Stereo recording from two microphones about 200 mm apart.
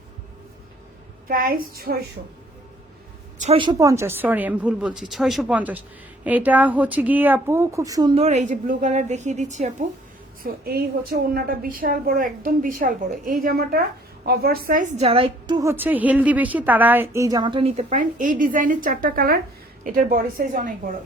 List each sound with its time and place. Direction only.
1.3 s a woman's voice: 45° right (ahead or behind)
3.4 s speech: 25° right (ahead or behind)
8.1 s a woman's voice: 35° right (ahead or behind)
10.4 s a woman's voice: 50° right (ahead or behind)